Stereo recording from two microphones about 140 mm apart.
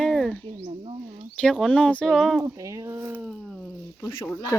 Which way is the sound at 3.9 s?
20° left (ahead or behind).